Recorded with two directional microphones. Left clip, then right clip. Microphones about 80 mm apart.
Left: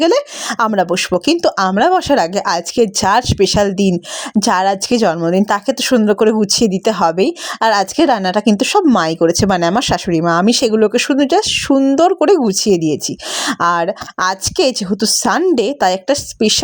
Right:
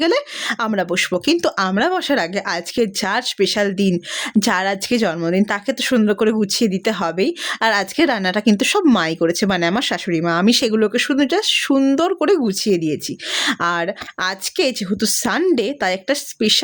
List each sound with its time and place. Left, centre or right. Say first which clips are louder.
0.0 s a woman's voice: left 4 dB; left
3.9 s a woman's voice: left 1 dB; centre; by 7.3 s left
7.6 s a woman's voice: left 5 dB; left
9.0 s speech: left 5 dB; left
10.4 s a woman's voice: left 4 dB; left
12.4 s speech: left 5 dB; left
13.4 s a woman's voice: left 5 dB; left